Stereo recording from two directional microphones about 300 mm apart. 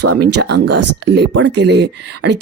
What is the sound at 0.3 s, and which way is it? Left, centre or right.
Speech, right.